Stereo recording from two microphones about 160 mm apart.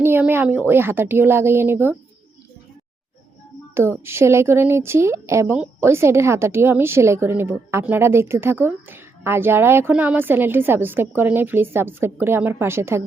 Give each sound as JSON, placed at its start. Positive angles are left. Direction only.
{"t": 0.0, "sound": "a sound", "side_deg": -15}
{"t": 0.7, "sound": "a woman's voice", "side_deg": -15}
{"t": 3.8, "sound": "a woman's voice", "side_deg": -15}